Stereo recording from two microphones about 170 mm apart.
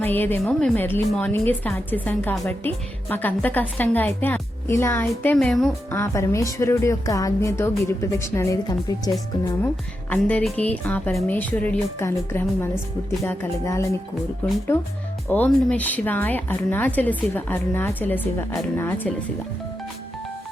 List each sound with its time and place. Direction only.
0.0 s a woman's voice: 10° left (ahead or behind)
5.9 s a woman's voice: 15° left (ahead or behind)
10.1 s a woman's voice: 10° left (ahead or behind)
15.3 s a woman's voice: 10° left (ahead or behind)